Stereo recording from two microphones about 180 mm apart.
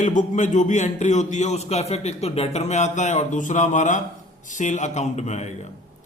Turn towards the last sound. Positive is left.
turn(degrees=40)  # may be behind; listen again after turning